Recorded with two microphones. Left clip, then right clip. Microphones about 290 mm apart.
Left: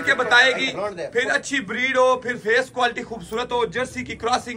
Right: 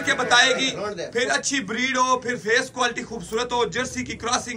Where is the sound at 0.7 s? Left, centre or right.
Left.